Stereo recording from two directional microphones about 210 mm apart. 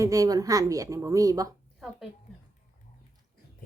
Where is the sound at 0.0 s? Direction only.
15° right (ahead or behind).